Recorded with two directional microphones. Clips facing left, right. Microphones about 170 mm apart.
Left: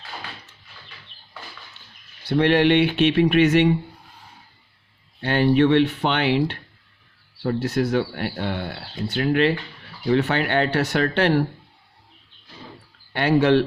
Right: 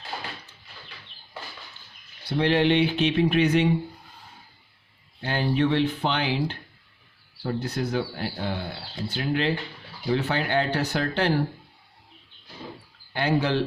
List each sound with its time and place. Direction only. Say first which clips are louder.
2.3 s speech: left 4 dB; 65° left (ahead or behind)
5.2 s speech: left 6 dB; 70° left (ahead or behind)
13.1 s speech: left 6 dB; 65° left (ahead or behind)